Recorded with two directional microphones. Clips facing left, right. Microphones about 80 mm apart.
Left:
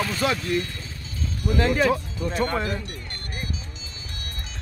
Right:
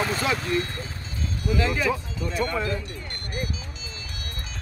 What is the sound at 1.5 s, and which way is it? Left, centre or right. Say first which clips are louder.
Speech: left 4 dB; left.